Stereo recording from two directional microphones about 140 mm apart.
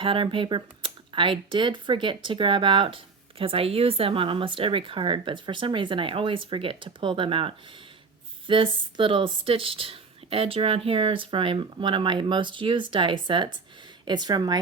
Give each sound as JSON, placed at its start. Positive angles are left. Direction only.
{"t": 0.0, "sound": "speech", "side_deg": -35}